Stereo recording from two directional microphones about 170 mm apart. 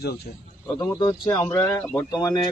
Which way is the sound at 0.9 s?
25° left (ahead or behind).